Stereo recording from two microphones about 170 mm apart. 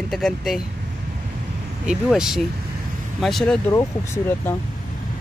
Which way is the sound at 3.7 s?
15° left (ahead or behind).